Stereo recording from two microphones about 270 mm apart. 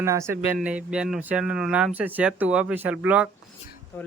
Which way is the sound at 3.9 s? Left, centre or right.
Centre.